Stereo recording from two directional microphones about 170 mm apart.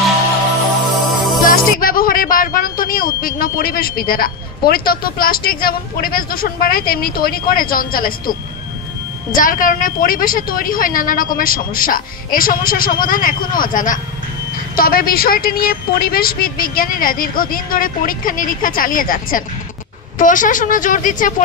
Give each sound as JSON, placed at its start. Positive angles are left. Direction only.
{"t": 0.8, "sound": "music", "side_deg": 0}
{"t": 1.4, "sound": "a woman's voice", "side_deg": 55}